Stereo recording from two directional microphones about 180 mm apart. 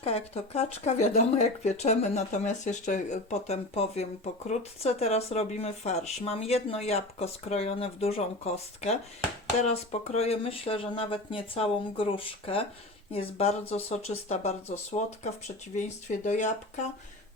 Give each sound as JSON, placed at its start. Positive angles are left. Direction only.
{"t": 0.0, "sound": "speech", "side_deg": 35}
{"t": 9.6, "sound": "speech", "side_deg": 40}